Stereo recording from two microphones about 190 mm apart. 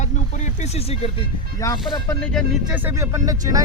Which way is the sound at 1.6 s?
20° left (ahead or behind).